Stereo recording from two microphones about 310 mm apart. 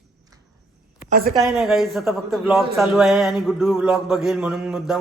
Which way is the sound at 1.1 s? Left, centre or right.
Right.